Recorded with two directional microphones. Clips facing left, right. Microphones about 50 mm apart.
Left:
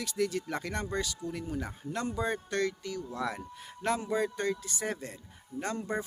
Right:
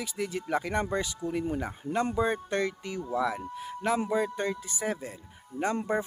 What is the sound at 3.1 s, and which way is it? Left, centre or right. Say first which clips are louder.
Speech: right 9 dB; centre.